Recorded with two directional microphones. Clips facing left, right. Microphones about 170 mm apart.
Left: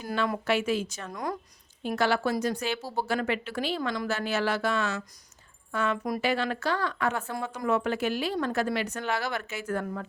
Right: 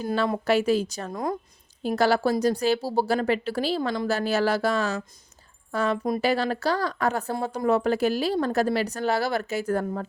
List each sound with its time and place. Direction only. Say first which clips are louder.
0.0 s a woman's voice: right 4 dB; 30° right (ahead or behind)
1.9 s a woman's voice: right 4 dB; 35° right (ahead or behind)